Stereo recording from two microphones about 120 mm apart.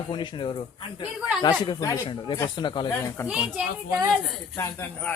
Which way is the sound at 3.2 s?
5° right (ahead or behind).